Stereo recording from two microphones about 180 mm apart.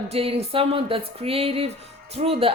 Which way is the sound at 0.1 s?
35° right (ahead or behind).